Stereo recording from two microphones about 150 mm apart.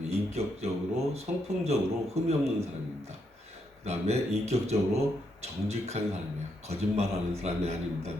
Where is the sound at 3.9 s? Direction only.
45° right (ahead or behind).